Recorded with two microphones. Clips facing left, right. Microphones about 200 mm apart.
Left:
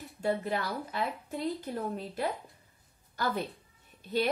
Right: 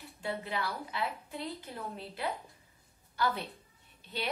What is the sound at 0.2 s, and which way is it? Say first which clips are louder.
A woman's voice: left 5 dB; 45° left (ahead or behind).